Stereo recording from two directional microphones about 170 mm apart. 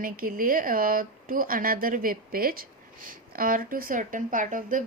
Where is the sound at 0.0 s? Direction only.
55° right (ahead or behind).